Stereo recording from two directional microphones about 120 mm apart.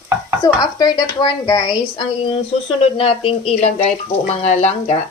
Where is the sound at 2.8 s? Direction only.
50° left (ahead or behind); by 4.9 s 70° left (ahead or behind).